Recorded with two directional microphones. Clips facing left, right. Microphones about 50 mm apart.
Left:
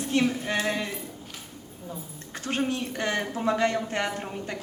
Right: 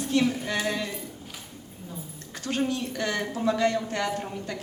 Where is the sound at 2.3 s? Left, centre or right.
Left.